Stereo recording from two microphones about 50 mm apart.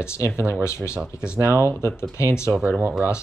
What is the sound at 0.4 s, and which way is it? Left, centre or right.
Speech, right.